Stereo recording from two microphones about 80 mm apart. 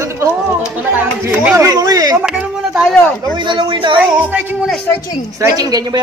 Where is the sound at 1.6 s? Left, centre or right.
Right.